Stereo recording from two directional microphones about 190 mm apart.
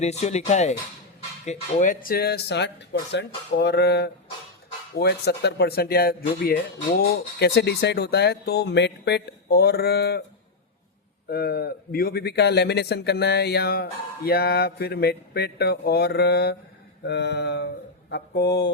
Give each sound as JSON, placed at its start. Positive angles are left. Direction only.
{"t": 0.0, "sound": "speech", "side_deg": 35}
{"t": 11.3, "sound": "speech", "side_deg": 55}